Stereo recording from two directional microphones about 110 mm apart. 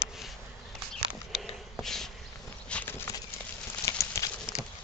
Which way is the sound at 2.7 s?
10° left (ahead or behind).